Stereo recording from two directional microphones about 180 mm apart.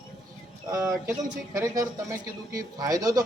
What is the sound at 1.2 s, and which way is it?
Speech, 20° right (ahead or behind).